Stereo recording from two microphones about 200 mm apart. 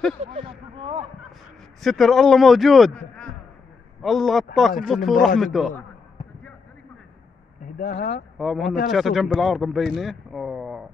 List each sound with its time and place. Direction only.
0.2 s speech: 30° right (ahead or behind)
1.8 s speech: centre (ahead or behind)
7.6 s speech: 45° left (ahead or behind)
8.4 s speech: centre (ahead or behind)